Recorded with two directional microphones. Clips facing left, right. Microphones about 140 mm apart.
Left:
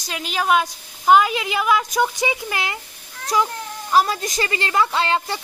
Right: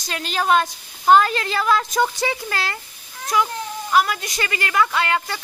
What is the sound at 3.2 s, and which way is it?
A woman's voice, 30° left (ahead or behind).